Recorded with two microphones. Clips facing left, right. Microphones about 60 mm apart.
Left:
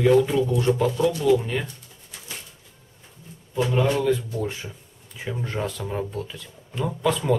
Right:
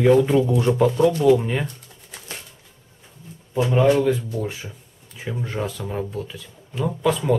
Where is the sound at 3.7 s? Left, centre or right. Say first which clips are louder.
Right 5 dB; centre.